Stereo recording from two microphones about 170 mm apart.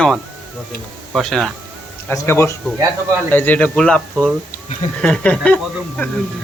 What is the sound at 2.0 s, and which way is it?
Speech, 15° left (ahead or behind).